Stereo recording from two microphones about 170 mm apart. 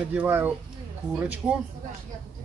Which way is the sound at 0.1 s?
10° right (ahead or behind).